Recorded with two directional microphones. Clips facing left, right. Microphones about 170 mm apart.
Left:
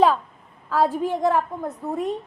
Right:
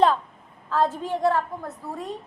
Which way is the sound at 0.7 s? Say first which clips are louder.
Left 3 dB; 10° left (ahead or behind).